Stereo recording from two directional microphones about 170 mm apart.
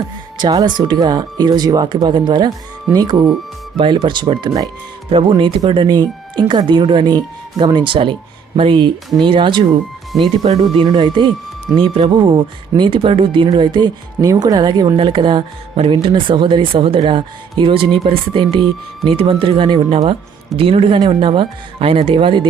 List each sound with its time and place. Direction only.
0.3 s speech: 25° right (ahead or behind)